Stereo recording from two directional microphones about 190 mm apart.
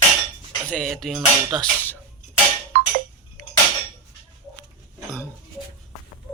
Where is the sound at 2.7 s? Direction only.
50° right (ahead or behind).